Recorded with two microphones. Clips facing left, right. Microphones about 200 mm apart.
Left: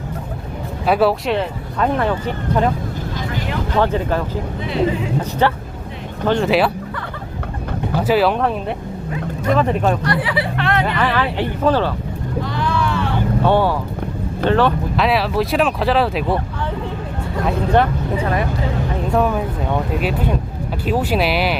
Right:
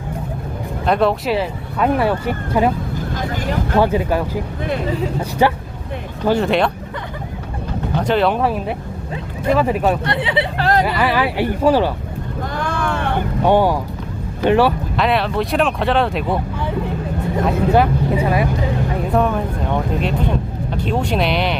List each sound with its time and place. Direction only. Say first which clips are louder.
0.9 s speech: left 1 dB; 5° left (ahead or behind)
3.2 s vehicle: right 2 dB; 45° right (ahead or behind)
3.8 s speech: right 2 dB; 10° right (ahead or behind)
4.6 s speech: left 3 dB; 50° right (ahead or behind)
5.4 s speech: right 4 dB; 10° right (ahead or behind)
7.9 s speech: left 1 dB; 5° left (ahead or behind)
10.0 s speech: even; 25° right (ahead or behind)
10.6 s music: right 4 dB; 35° right (ahead or behind)
10.8 s speech: right 1 dB; 10° right (ahead or behind)
12.4 s vehicle: left 2 dB; 50° right (ahead or behind)
13.4 s speech: right 3 dB; 15° right (ahead or behind)
14.9 s speech: left 2 dB; centre (ahead or behind)
17.4 s speech: right 1 dB; 5° right (ahead or behind)
19.1 s speech: even; 5° left (ahead or behind)